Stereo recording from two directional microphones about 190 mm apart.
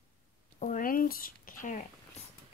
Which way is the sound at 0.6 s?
45° left (ahead or behind).